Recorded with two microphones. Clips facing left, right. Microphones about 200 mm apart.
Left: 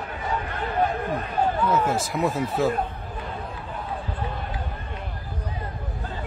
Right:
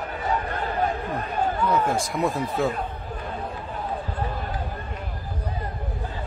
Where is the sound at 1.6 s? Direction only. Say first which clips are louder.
Even; 5° left (ahead or behind).